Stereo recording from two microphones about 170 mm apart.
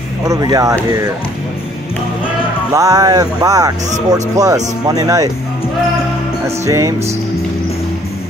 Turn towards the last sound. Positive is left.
turn(degrees=-15)  # may be behind; listen again after turning